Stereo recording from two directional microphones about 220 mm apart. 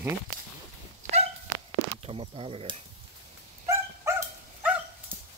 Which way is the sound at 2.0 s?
25° right (ahead or behind).